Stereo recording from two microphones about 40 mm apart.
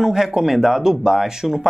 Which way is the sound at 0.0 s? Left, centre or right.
Centre.